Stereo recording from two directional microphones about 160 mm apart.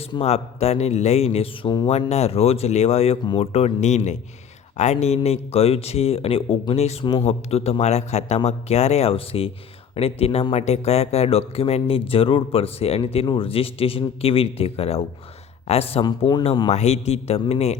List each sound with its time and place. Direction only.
0.1 s speech: 40° left (ahead or behind)
7.3 s a man's voice: 40° left (ahead or behind)